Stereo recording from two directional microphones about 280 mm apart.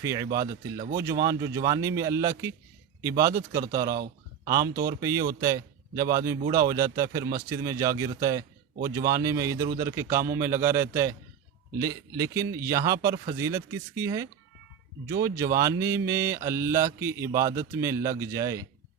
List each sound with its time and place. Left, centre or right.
0.0 s speech: centre
3.9 s a sound: right
4.7 s speech: right
4.9 s speech: centre